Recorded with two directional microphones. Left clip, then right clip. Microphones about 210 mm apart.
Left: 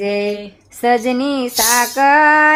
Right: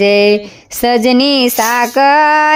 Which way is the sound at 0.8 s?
40° right (ahead or behind).